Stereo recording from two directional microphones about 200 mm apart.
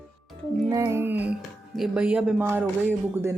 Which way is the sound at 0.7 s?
15° right (ahead or behind).